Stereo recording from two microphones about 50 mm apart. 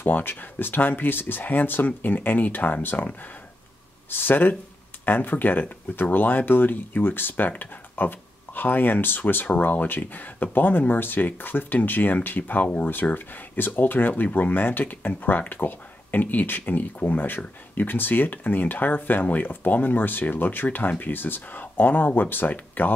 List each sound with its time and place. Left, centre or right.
0.0 s speech: left
4.1 s speech: left